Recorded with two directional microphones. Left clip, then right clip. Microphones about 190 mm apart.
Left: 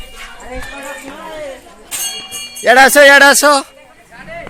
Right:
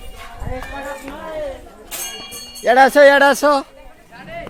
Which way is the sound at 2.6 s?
25° left (ahead or behind).